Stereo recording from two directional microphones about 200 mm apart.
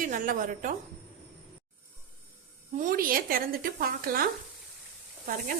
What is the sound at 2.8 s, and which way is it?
Speech, 45° right (ahead or behind).